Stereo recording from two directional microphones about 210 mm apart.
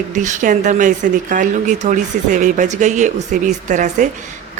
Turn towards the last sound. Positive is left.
turn(degrees=-35)  # may be behind; listen again after turning